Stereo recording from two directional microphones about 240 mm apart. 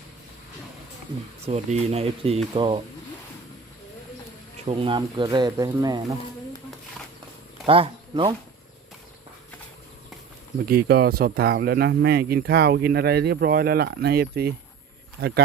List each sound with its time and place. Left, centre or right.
1.5 s speech: right
4.6 s speech: right
7.7 s speech: right
10.7 s speech: right